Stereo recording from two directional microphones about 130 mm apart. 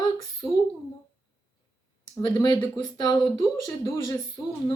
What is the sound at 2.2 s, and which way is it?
Speech, 35° left (ahead or behind).